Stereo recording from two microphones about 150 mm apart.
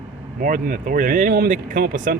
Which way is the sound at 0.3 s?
65° right (ahead or behind).